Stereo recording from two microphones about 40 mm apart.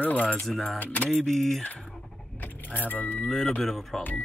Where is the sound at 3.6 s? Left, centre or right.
Centre.